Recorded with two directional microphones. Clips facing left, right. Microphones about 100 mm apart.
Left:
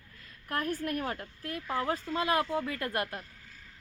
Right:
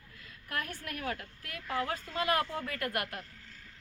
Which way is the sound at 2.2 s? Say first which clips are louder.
Left 2 dB; 20° left (ahead or behind).